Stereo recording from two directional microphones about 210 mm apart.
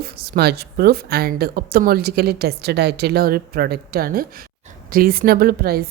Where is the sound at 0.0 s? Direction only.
50° right (ahead or behind).